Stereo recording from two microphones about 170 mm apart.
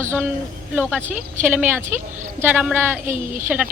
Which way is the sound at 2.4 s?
10° right (ahead or behind).